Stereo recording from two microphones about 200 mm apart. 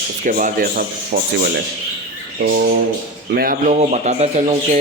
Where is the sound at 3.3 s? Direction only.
45° right (ahead or behind).